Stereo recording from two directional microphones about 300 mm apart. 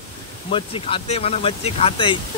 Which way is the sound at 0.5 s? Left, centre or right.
Centre.